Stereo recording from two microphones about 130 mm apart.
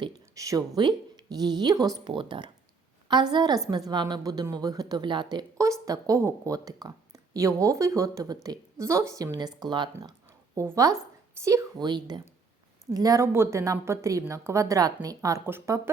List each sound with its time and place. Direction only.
0.0 s a woman's voice: 30° right (ahead or behind)
10.0 s a sound: 30° right (ahead or behind)
11.4 s a woman's voice: 30° right (ahead or behind)